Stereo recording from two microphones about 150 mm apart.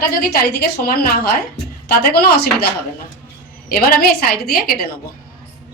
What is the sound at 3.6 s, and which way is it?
A woman's voice, 75° left (ahead or behind).